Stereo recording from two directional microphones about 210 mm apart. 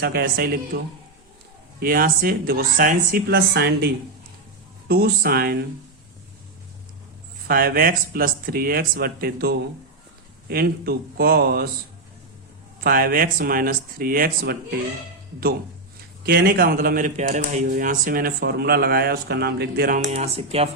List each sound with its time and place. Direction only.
0.0 s speech: 50° right (ahead or behind)
1.8 s speech: 45° right (ahead or behind)
7.4 s speech: 45° right (ahead or behind)
12.8 s speech: 45° right (ahead or behind)
16.2 s speech: 50° right (ahead or behind)
20.1 s speech: 30° right (ahead or behind)